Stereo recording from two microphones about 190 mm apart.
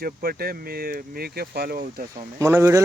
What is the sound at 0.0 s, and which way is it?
Speech, 50° right (ahead or behind).